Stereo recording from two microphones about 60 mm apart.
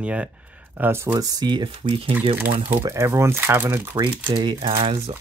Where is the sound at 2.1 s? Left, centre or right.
Right.